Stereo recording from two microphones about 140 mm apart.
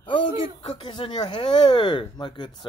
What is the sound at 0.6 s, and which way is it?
Speech, 40° left (ahead or behind).